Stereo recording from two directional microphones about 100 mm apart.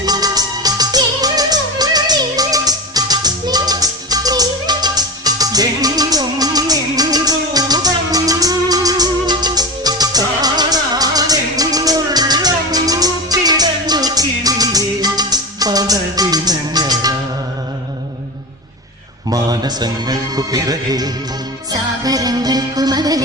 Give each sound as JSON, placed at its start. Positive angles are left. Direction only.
{"t": 0.0, "sound": "music", "side_deg": -40}
{"t": 19.3, "sound": "a man's voice", "side_deg": -40}
{"t": 21.7, "sound": "music", "side_deg": -40}